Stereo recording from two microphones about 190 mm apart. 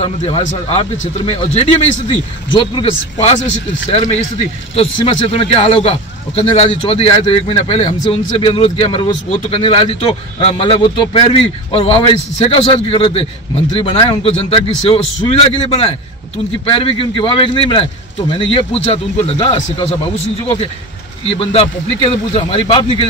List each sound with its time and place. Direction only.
0.0 s a man's voice: 30° left (ahead or behind)